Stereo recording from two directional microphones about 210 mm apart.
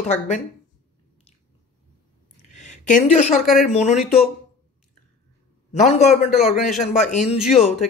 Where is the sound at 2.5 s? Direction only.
35° left (ahead or behind).